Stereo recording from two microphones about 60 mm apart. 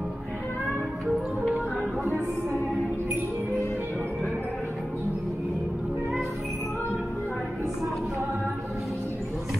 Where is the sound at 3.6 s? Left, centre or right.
Left.